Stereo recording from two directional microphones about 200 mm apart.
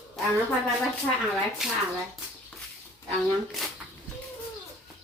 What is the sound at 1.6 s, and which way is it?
Speech, centre (ahead or behind).